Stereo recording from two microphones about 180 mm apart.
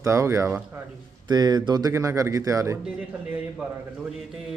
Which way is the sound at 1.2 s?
20° right (ahead or behind).